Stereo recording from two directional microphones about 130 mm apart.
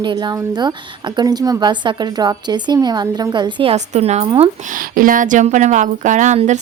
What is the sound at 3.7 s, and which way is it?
Speech, 55° right (ahead or behind).